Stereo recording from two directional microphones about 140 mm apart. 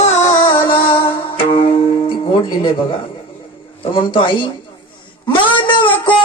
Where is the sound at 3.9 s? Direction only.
35° left (ahead or behind).